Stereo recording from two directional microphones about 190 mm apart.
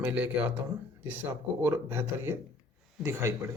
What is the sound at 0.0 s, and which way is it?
Speech, 10° right (ahead or behind).